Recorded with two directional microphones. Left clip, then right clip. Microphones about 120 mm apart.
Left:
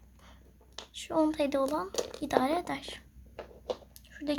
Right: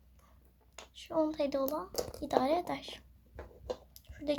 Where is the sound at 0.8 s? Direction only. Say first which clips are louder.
Left 4 dB; 25° left (ahead or behind).